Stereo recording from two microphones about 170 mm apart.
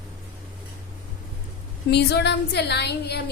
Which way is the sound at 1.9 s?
75° left (ahead or behind).